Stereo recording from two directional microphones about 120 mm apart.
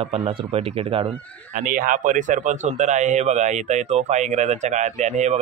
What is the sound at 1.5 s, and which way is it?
Speech, 90° right.